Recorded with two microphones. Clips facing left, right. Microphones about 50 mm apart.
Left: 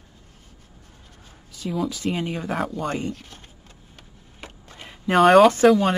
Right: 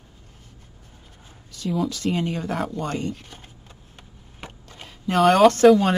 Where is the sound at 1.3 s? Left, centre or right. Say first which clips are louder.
Right 2 dB; centre.